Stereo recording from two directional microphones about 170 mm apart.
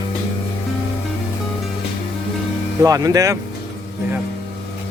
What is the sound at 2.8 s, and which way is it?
Speech, 20° right (ahead or behind).